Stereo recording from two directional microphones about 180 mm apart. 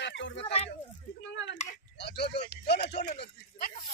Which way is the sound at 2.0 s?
65° left (ahead or behind).